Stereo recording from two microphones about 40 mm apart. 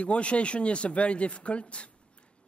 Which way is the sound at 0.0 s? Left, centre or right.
Left.